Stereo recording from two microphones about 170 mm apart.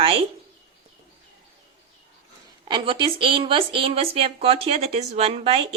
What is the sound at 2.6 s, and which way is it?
Speech, 30° right (ahead or behind).